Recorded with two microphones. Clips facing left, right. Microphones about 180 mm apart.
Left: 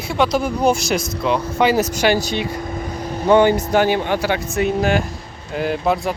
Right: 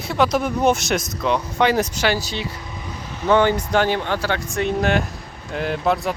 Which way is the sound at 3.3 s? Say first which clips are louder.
Left 3 dB; 15° left (ahead or behind).